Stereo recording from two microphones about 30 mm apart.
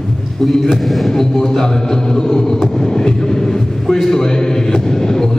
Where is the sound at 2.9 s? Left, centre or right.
Left.